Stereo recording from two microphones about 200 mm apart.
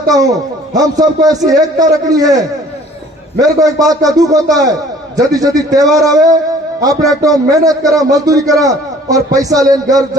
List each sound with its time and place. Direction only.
0.1 s a man's voice: 20° right (ahead or behind)
3.6 s a man's voice: 20° right (ahead or behind)